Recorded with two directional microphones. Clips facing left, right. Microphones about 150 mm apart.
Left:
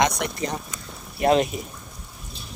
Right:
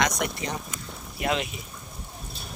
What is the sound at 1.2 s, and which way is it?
Speech, 40° left (ahead or behind).